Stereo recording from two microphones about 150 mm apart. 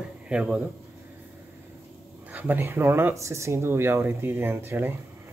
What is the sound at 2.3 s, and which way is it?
Speech, 10° right (ahead or behind).